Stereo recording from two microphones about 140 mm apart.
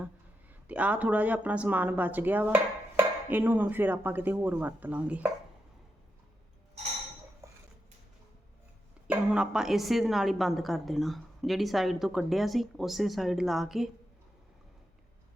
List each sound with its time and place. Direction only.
0.7 s speech: 10° right (ahead or behind)
7.4 s dishes: 25° right (ahead or behind)
9.0 s a woman's voice: 5° right (ahead or behind)